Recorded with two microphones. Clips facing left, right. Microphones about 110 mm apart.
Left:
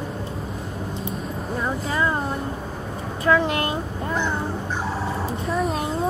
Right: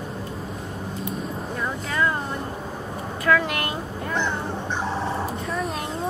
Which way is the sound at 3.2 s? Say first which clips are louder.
Left 2 dB; 25° left (ahead or behind).